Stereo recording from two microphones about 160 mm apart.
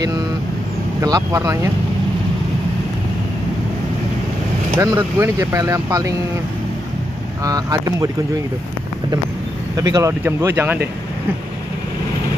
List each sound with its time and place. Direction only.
1.0 s speech: 20° right (ahead or behind)
4.7 s speech: 20° right (ahead or behind)
7.4 s speech: 20° right (ahead or behind)
9.8 s speech: 20° right (ahead or behind)